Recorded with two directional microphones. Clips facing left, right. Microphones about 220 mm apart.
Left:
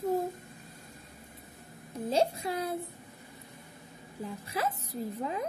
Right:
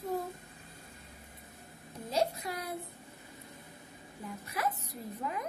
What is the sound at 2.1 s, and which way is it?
Speech, 30° left (ahead or behind).